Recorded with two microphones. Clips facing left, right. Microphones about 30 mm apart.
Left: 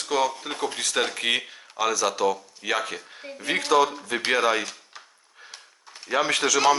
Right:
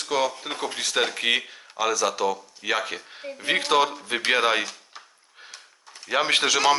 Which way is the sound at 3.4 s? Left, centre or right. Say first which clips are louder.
Even; right.